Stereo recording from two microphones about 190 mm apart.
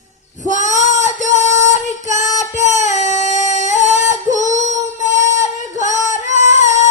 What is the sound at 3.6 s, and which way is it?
Singing, 40° left (ahead or behind).